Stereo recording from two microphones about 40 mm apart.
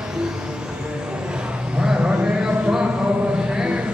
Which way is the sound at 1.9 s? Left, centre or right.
Right.